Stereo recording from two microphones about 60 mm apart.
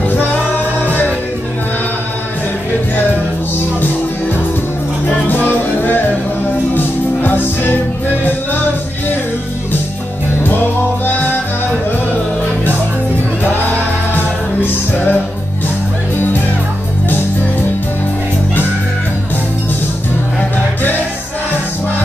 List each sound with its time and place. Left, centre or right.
0.4 s music: left
5.3 s music: left
11.1 s music: left
13.4 s music: left